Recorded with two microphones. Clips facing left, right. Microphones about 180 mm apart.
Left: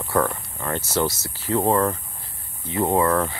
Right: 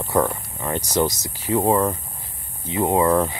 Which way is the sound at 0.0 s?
15° right (ahead or behind).